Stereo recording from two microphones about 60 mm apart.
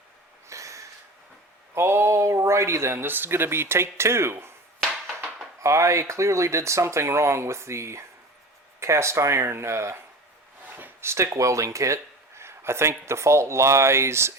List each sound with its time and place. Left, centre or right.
0.4 s snort: right
1.7 s speech: right
5.5 s speech: right
10.7 s a sound: right
11.0 s speech: right
12.4 s speech: right